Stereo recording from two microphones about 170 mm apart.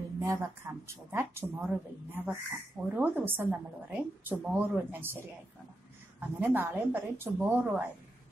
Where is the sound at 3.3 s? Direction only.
10° right (ahead or behind).